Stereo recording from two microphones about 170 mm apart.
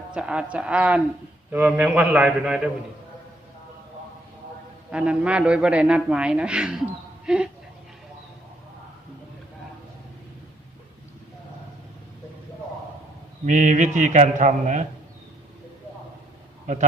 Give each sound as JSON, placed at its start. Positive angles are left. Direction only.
{"t": 0.1, "sound": "a man's voice", "side_deg": -5}
{"t": 4.9, "sound": "a man's voice", "side_deg": -5}
{"t": 13.4, "sound": "a man's voice", "side_deg": -45}